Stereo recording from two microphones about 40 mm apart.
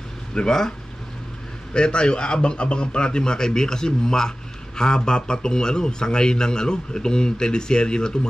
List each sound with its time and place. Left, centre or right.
0.3 s speech: centre